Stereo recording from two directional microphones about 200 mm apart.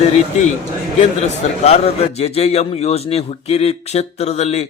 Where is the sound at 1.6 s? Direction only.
30° left (ahead or behind).